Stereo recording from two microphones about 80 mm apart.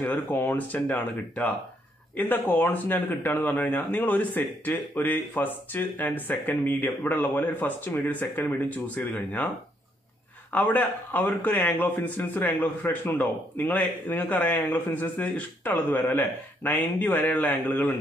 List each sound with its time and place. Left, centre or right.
0.0 s a man's voice: left
10.5 s a man's voice: left